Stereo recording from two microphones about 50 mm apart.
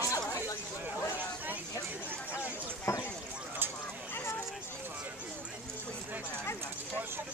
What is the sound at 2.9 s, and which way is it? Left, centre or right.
Speech, left.